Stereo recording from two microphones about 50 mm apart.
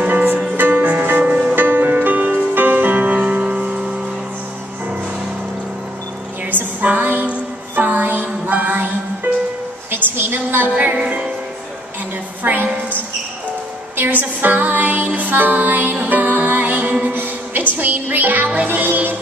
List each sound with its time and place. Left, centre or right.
0.0 s music: right
6.5 s music: right
9.8 s a sound: right
10.7 s music: right
11.0 s music: centre
12.4 s a sound: right
13.9 s music: right
17.1 s music: right